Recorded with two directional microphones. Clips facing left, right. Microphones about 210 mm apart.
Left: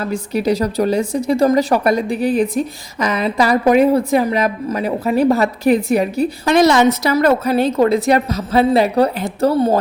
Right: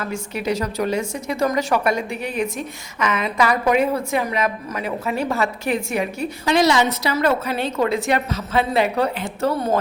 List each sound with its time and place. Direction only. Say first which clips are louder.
0.0 s a woman's voice: left 7 dB; 35° left (ahead or behind)
6.4 s a woman's voice: left 5 dB; 50° left (ahead or behind); by 9.8 s 35° left (ahead or behind)